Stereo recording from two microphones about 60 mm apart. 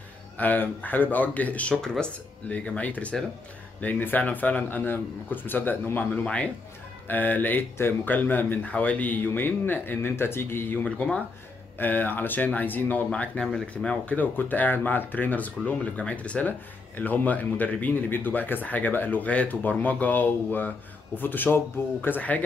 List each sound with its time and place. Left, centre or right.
0.4 s speech: left
6.2 s speech: centre
7.1 s speech: left
10.8 s speech: centre
11.8 s speech: left
13.4 s speech: centre
14.1 s speech: left